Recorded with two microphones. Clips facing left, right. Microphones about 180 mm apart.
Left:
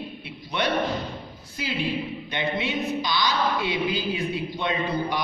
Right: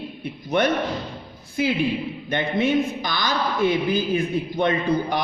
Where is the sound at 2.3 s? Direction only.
50° right (ahead or behind).